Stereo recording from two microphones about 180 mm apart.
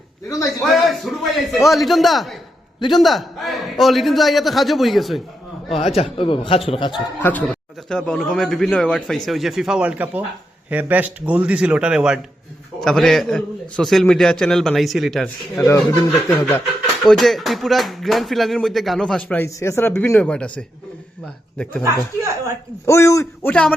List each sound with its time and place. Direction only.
0.7 s speech: centre (ahead or behind)
5.7 s a man's voice: 35° left (ahead or behind)
7.2 s speech: 10° left (ahead or behind)
15.6 s a man's voice: 15° left (ahead or behind)
17.0 s speech: centre (ahead or behind)
21.8 s speech: 15° right (ahead or behind)
22.9 s a man's voice: 15° left (ahead or behind)